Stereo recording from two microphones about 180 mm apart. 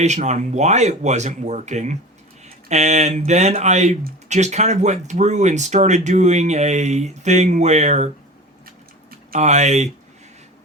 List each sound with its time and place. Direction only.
0.0 s speech: 40° right (ahead or behind)
9.3 s speech: 40° right (ahead or behind)